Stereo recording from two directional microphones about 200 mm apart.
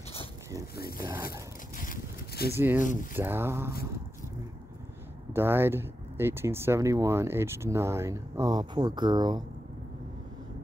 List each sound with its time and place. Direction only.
0.7 s speech: 50° left (ahead or behind)
1.8 s boat: 50° left (ahead or behind)
2.5 s speech: 10° right (ahead or behind)
2.8 s speech: 40° left (ahead or behind)
3.2 s speech: 10° right (ahead or behind)
5.3 s speech: 10° right (ahead or behind)